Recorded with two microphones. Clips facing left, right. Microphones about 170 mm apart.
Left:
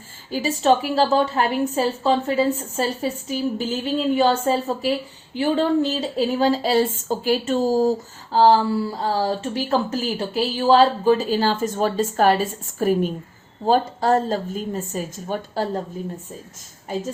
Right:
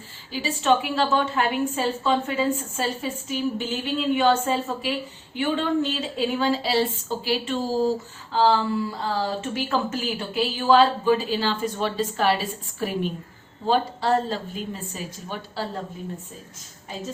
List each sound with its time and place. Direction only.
0.3 s a woman's voice: 45° left (ahead or behind)